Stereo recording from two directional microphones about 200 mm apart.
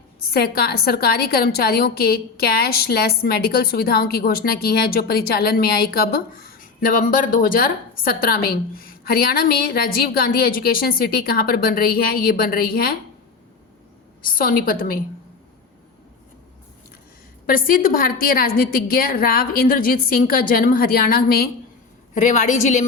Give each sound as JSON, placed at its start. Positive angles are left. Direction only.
{"t": 0.3, "sound": "a woman's voice", "side_deg": 50}
{"t": 14.2, "sound": "a woman's voice", "side_deg": 45}
{"t": 17.4, "sound": "a woman's voice", "side_deg": 45}
{"t": 22.1, "sound": "a woman's voice", "side_deg": 40}